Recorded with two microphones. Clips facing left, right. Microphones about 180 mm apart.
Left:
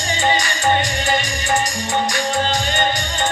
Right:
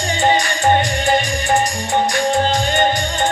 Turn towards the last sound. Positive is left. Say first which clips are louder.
# right 4 dB
turn(degrees=-50)  # may be behind; listen again after turning